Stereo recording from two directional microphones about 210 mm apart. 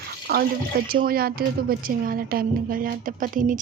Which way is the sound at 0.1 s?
45° right (ahead or behind).